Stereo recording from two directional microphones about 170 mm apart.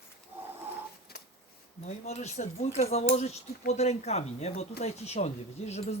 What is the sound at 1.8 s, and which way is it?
Speech, 40° left (ahead or behind).